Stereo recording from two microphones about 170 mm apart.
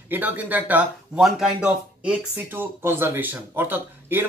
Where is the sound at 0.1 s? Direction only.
10° right (ahead or behind).